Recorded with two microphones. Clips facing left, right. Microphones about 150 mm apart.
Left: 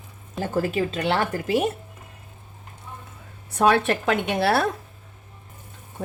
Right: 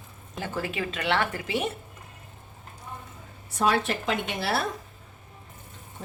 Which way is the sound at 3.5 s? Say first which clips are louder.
Left 5 dB; 60° left (ahead or behind).